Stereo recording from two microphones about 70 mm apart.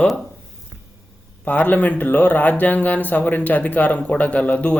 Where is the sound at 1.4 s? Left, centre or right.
Left.